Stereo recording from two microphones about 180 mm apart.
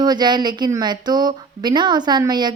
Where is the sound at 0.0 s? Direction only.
25° right (ahead or behind).